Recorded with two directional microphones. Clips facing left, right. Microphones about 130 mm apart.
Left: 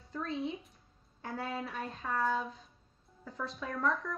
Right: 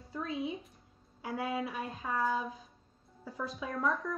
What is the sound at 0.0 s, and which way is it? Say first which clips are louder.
Speech: even; centre (ahead or behind).